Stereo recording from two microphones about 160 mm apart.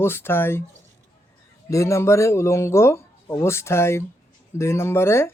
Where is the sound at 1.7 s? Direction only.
20° left (ahead or behind).